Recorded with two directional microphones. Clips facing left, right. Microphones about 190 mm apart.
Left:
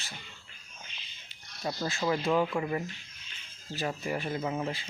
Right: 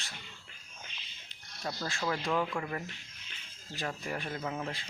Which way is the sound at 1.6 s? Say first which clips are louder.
Left 4 dB; 10° left (ahead or behind).